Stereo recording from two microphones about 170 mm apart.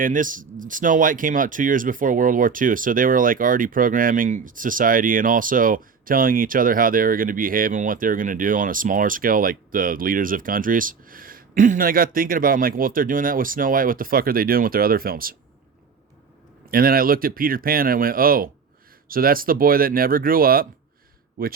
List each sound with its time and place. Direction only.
0.0 s speech: 50° right (ahead or behind)
16.6 s speech: 60° right (ahead or behind)